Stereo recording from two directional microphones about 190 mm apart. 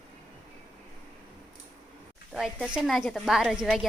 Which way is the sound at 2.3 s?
Centre (ahead or behind).